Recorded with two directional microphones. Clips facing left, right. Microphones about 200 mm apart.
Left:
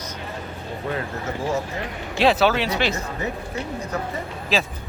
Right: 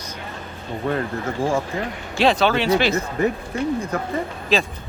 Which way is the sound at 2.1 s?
5° left (ahead or behind).